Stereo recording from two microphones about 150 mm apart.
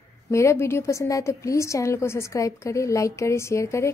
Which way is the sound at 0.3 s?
20° left (ahead or behind).